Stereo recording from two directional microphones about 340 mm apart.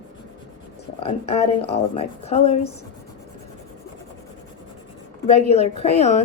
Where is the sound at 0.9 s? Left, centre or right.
Centre.